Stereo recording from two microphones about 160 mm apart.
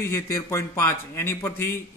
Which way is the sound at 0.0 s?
20° left (ahead or behind).